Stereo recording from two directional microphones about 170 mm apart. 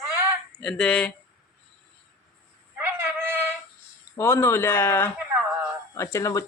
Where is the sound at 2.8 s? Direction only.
15° right (ahead or behind).